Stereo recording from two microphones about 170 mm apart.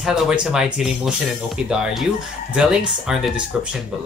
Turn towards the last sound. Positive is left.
turn(degrees=-5)  # may be behind; listen again after turning